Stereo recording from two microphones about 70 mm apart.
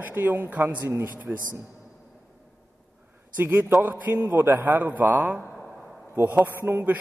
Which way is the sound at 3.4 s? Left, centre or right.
Right.